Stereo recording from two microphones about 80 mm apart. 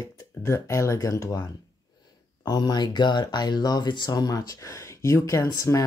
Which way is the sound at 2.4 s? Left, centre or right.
Left.